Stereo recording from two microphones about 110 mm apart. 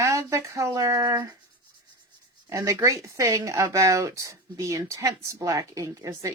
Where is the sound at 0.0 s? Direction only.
25° right (ahead or behind).